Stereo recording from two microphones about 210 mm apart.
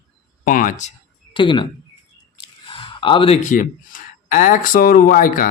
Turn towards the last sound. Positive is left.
turn(degrees=40)  # may be behind; listen again after turning